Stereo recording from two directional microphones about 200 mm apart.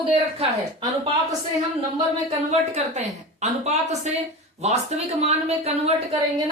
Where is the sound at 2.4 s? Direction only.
35° right (ahead or behind).